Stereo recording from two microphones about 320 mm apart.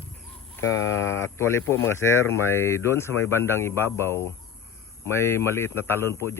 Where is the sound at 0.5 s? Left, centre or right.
Centre.